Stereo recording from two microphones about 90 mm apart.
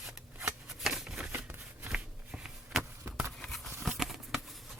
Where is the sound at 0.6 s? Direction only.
5° right (ahead or behind).